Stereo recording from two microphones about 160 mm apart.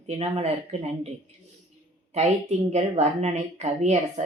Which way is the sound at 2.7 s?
45° right (ahead or behind).